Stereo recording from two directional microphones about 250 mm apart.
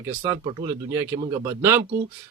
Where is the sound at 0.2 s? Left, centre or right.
Centre.